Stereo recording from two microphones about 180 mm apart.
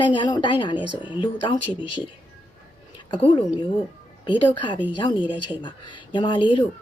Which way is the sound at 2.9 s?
30° left (ahead or behind).